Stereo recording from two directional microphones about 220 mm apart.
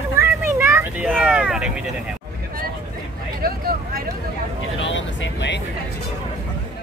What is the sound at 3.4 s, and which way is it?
Speech, 40° right (ahead or behind).